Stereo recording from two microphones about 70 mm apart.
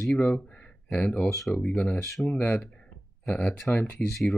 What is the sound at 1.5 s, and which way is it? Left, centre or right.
Speech, centre.